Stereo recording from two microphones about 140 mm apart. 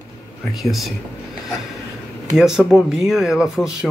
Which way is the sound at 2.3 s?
5° right (ahead or behind).